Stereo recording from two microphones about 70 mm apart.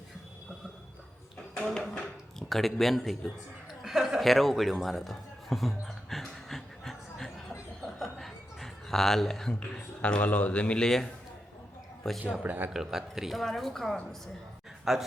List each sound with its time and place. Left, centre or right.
1.5 s speech: centre
4.2 s a sound: centre
7.8 s chuckle: centre
12.0 s speech: centre
12.4 s speech: right
12.7 s speech: centre